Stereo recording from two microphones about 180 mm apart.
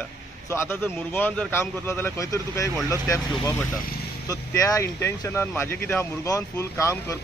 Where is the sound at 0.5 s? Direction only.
15° left (ahead or behind).